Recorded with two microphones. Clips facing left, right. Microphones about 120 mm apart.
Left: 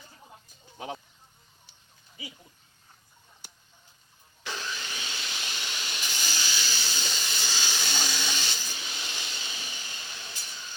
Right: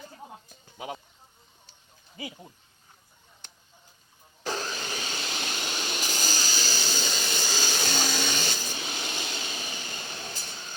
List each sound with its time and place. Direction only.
0.8 s speech: 5° right (ahead or behind)
2.1 s speech: 50° right (ahead or behind)
3.4 s a sound: 10° left (ahead or behind)
4.4 s vacuum cleaner: 40° right (ahead or behind)